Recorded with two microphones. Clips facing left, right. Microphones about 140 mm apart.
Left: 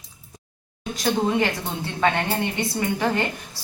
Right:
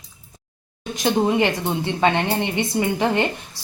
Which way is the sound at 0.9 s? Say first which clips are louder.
Right 3 dB; 20° right (ahead or behind).